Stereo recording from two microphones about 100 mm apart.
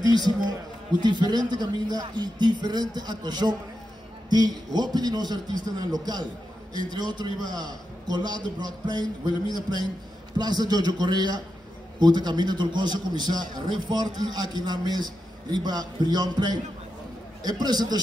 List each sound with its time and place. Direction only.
0.0 s a man's voice: 40° right (ahead or behind)